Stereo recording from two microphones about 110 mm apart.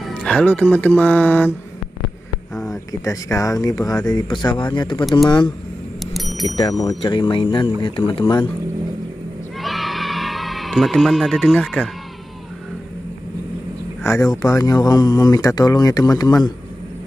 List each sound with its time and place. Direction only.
0.0 s speech: 10° left (ahead or behind)
2.5 s a sound: centre (ahead or behind)
3.0 s speech: 30° left (ahead or behind)
6.1 s a sound: centre (ahead or behind)
6.6 s speech: 35° left (ahead or behind)
6.9 s speech: 50° left (ahead or behind)
9.6 s a sound: centre (ahead or behind)
11.6 s speech: centre (ahead or behind)
14.0 s speech: 25° left (ahead or behind)